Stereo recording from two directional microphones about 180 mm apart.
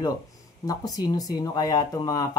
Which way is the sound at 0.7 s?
20° left (ahead or behind).